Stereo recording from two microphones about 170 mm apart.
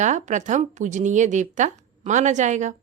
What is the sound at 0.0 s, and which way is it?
Speech, 45° right (ahead or behind).